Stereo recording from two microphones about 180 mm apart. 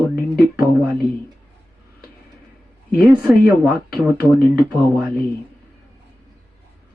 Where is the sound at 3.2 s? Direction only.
10° right (ahead or behind).